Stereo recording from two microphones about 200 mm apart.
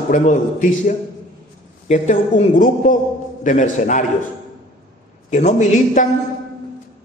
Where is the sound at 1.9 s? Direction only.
40° left (ahead or behind).